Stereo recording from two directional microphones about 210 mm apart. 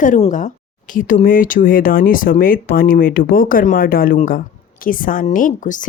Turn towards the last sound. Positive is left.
turn(degrees=40)  # may be behind; listen again after turning